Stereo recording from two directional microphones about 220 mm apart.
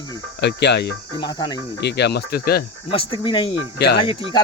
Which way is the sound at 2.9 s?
20° left (ahead or behind).